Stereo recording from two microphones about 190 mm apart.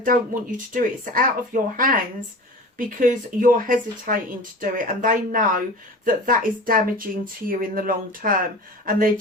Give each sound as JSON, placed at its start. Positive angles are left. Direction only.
{"t": 0.0, "sound": "speech", "side_deg": -45}